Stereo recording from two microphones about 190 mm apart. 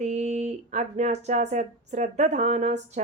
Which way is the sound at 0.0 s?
35° right (ahead or behind).